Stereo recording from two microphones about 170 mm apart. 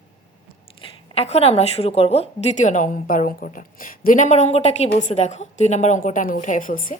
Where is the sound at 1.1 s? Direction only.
35° left (ahead or behind).